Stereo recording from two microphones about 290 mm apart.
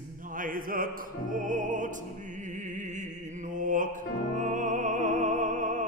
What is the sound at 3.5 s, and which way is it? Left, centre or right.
Music, right.